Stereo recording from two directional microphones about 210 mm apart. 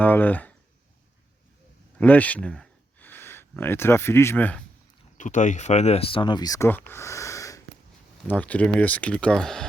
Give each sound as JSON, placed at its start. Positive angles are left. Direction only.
{"t": 0.0, "sound": "speech", "side_deg": 10}
{"t": 2.0, "sound": "speech", "side_deg": 5}
{"t": 5.1, "sound": "speech", "side_deg": 35}